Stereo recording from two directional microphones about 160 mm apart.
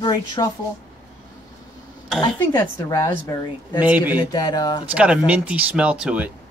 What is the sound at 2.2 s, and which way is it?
A woman's voice, 25° left (ahead or behind).